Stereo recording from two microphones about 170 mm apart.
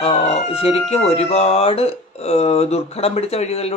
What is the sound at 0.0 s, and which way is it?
Speech, 35° left (ahead or behind).